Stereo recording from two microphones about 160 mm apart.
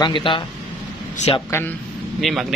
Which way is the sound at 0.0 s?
30° left (ahead or behind).